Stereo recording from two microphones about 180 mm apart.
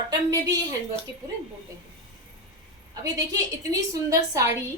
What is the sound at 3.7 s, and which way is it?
Speech, 20° right (ahead or behind).